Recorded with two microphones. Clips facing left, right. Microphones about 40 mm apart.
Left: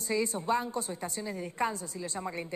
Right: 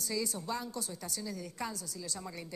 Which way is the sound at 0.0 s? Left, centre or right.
Left.